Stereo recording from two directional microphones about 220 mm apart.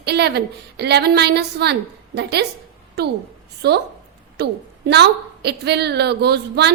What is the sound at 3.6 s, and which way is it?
A woman's voice, 50° right (ahead or behind).